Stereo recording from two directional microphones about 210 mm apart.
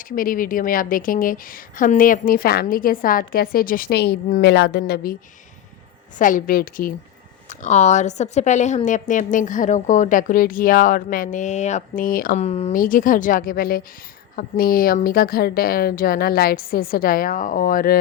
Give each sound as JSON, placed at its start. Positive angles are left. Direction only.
{"t": 0.2, "sound": "a woman's voice", "side_deg": 40}
{"t": 6.1, "sound": "a woman's voice", "side_deg": 40}
{"t": 12.4, "sound": "a woman's voice", "side_deg": 30}